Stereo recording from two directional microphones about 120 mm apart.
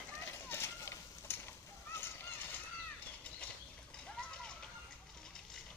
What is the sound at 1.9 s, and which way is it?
Splash, 20° left (ahead or behind).